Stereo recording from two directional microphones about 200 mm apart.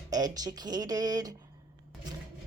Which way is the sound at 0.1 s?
20° right (ahead or behind).